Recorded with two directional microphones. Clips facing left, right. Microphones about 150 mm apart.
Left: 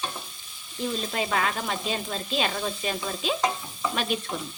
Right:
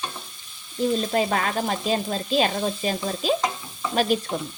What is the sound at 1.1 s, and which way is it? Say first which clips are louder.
Frying: right 4 dB; 40° right (ahead or behind).